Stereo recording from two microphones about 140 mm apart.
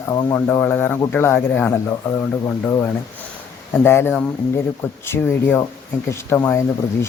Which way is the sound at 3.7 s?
15° left (ahead or behind).